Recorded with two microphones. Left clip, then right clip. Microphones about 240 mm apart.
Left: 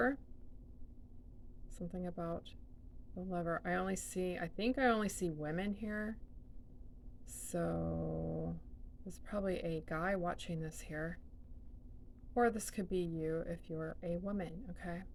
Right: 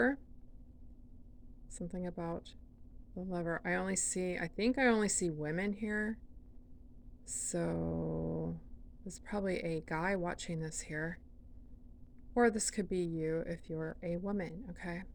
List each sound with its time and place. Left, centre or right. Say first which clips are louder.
1.8 s a woman's voice: right 2 dB; right
7.3 s a woman's voice: right 2 dB; right
12.3 s a woman's voice: right 3 dB; right